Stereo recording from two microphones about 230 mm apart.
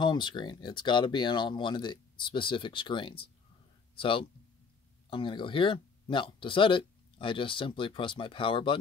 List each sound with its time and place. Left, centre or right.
0.0 s speech: centre